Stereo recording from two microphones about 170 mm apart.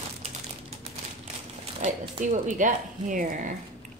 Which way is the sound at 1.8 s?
50° right (ahead or behind).